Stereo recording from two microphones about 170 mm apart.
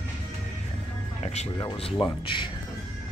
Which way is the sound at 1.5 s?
30° left (ahead or behind).